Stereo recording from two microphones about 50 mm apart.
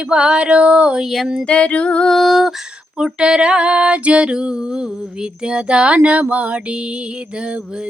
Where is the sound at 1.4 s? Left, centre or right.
Left.